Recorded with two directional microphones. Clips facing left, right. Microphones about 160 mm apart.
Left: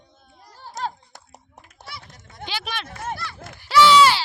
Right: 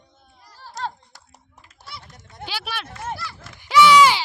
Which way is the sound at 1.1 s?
55° left (ahead or behind).